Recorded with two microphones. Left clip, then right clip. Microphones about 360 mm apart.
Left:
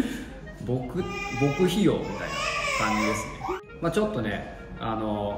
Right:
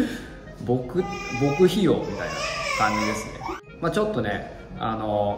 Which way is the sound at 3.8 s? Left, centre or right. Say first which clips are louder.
Right 3 dB; centre.